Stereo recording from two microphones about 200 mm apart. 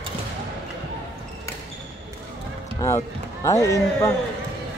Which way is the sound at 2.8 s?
15° left (ahead or behind).